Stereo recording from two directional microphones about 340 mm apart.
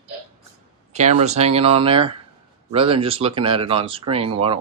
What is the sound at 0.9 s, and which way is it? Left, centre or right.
Speech, centre.